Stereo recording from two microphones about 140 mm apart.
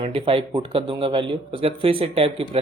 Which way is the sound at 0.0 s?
40° right (ahead or behind).